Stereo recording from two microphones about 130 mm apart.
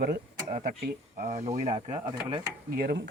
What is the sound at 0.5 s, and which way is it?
Speech, 90° right.